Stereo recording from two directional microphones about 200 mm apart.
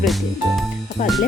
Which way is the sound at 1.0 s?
40° left (ahead or behind).